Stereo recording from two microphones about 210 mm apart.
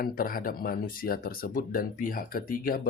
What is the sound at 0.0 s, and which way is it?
Speech, 45° left (ahead or behind).